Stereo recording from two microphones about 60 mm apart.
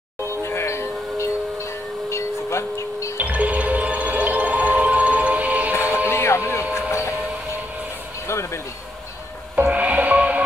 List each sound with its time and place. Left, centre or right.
0.3 s music: left
3.2 s music: right
5.7 s music: left
8.3 s a sound: left
9.7 s music: right